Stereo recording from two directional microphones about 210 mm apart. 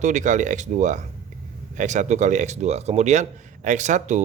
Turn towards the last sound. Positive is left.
turn(degrees=-35)  # may be behind; listen again after turning